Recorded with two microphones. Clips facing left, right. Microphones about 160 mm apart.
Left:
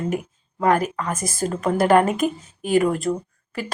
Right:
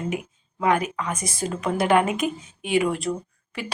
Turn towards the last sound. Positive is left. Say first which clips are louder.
# left 3 dB
turn(degrees=40)  # may be behind; listen again after turning